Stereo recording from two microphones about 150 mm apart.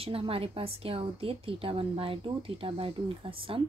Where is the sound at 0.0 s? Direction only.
40° right (ahead or behind).